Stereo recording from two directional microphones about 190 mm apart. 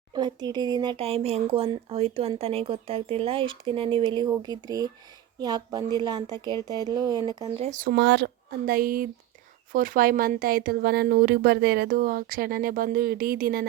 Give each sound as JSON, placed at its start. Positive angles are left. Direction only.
{"t": 0.1, "sound": "a sound", "side_deg": -20}
{"t": 0.4, "sound": "speech", "side_deg": -20}
{"t": 7.4, "sound": "speech", "side_deg": -35}
{"t": 7.9, "sound": "a woman's voice", "side_deg": -65}